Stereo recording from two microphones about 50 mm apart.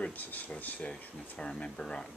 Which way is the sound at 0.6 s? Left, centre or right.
Left.